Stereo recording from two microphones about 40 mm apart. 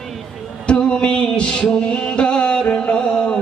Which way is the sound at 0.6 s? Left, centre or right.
Left.